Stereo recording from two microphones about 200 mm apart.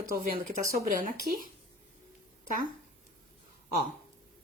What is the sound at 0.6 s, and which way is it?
Speech, 15° right (ahead or behind).